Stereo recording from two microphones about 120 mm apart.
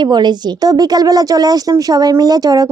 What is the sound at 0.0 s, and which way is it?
Speech, 35° right (ahead or behind).